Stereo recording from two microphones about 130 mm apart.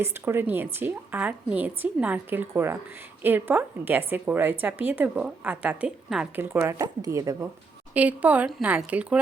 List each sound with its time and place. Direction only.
0.0 s a woman's voice: 20° right (ahead or behind)
7.9 s a woman's voice: 10° right (ahead or behind)